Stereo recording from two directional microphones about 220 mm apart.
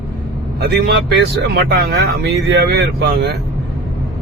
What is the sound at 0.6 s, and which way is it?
Speech, 45° right (ahead or behind).